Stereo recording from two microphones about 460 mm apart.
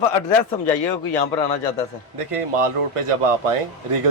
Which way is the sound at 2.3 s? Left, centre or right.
Right.